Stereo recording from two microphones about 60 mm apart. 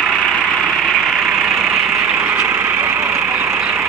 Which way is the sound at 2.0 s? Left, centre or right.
Right.